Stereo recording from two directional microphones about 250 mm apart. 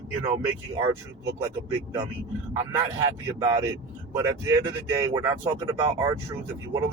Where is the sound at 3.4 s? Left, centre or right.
Centre.